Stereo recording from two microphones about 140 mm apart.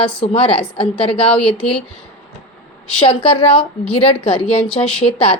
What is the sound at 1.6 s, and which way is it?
Speech, 5° left (ahead or behind).